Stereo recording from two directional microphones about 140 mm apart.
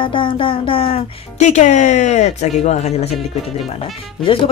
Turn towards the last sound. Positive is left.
turn(degrees=40)  # may be behind; listen again after turning